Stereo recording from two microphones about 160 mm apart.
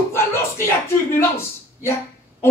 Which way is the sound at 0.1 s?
15° left (ahead or behind).